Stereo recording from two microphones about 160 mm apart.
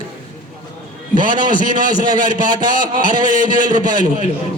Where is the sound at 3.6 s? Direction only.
25° right (ahead or behind).